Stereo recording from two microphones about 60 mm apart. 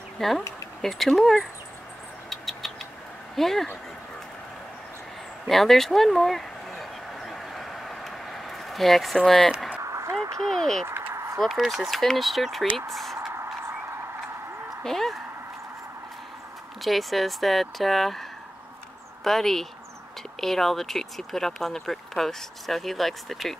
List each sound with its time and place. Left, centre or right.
0.2 s speech: centre
2.2 s mouse: centre
3.3 s speech: centre
5.5 s a sound: centre
9.8 s a sound: right
10.5 s speech: centre
10.9 s a sound: right
11.3 s speech: centre
13.8 s a sound: right
14.8 s speech: centre
16.8 s speech: centre
19.2 s speech: centre